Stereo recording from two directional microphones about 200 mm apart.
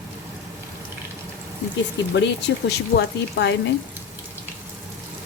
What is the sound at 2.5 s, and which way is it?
A woman's voice, 65° left (ahead or behind).